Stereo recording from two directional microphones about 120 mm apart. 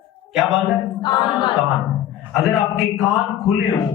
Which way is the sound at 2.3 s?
Centre (ahead or behind).